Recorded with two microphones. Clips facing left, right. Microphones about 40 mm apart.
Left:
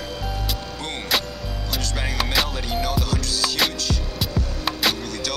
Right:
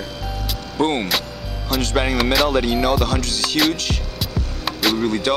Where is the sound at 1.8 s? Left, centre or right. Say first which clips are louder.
Right 8 dB; right.